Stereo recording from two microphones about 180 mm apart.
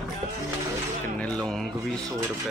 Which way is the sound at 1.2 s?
5° left (ahead or behind).